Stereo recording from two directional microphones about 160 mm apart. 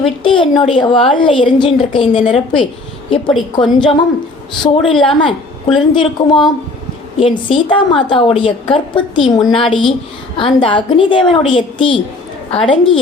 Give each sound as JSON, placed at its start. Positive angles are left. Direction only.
{"t": 0.0, "sound": "a woman's voice", "side_deg": 35}
{"t": 5.0, "sound": "a woman's voice", "side_deg": 30}